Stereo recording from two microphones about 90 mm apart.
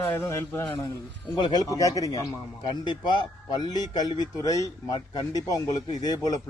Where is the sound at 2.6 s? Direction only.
60° left (ahead or behind); by 4.7 s 40° left (ahead or behind).